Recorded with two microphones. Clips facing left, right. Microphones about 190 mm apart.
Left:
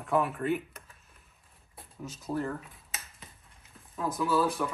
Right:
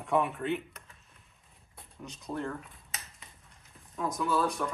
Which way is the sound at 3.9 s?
5° left (ahead or behind).